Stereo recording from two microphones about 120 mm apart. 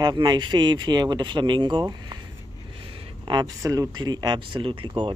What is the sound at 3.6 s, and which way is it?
Speech, 30° right (ahead or behind).